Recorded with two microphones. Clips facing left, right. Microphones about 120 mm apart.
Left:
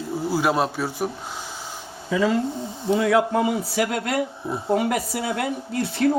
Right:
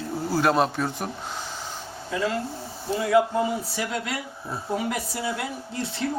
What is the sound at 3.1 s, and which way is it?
A man's voice, 90° left.